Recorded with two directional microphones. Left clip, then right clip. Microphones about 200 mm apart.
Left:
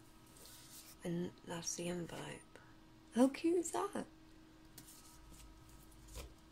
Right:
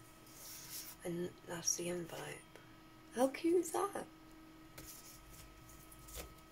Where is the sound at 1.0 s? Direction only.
40° left (ahead or behind).